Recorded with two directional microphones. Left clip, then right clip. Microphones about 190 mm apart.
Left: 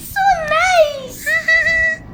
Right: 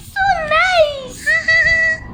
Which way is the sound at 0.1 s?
25° right (ahead or behind).